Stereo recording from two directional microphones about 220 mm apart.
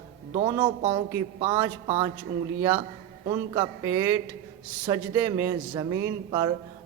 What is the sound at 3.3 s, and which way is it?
A man's voice, 15° right (ahead or behind).